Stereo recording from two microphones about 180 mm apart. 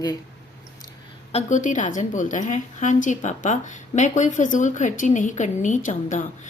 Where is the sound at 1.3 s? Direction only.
40° left (ahead or behind).